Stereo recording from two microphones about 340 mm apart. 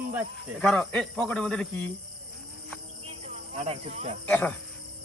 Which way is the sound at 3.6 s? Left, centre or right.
Centre.